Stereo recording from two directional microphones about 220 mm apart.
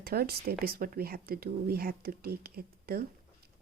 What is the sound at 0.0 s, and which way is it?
Speech, 45° right (ahead or behind).